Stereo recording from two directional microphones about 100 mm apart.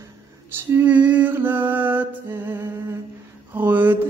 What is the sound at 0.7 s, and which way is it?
Mantra, 15° right (ahead or behind).